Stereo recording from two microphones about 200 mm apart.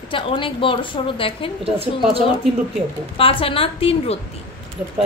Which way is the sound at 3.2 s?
25° left (ahead or behind).